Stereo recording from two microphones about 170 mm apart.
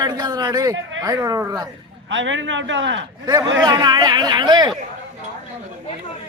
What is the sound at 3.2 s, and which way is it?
A man's voice, 20° right (ahead or behind).